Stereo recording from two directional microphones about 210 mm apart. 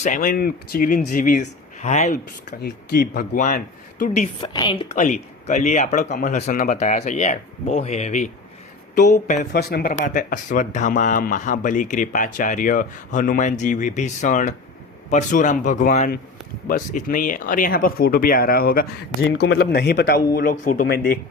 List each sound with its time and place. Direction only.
0.0 s speech: 40° left (ahead or behind)
2.6 s speech: 50° left (ahead or behind)
4.4 s a woman's voice: 20° left (ahead or behind)
4.9 s speech: 35° left (ahead or behind)
9.5 s speech: 50° left (ahead or behind)